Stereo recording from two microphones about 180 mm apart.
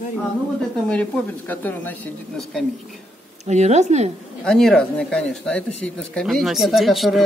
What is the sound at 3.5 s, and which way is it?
Speech, 40° right (ahead or behind).